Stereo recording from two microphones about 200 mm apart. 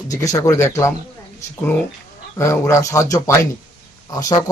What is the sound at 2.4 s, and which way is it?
Speech, 15° left (ahead or behind).